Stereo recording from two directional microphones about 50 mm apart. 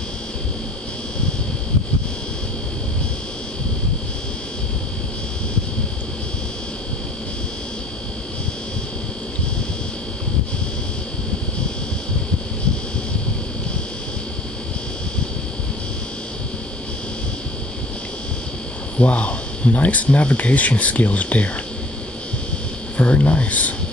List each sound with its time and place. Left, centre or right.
18.9 s speech: left
22.9 s speech: left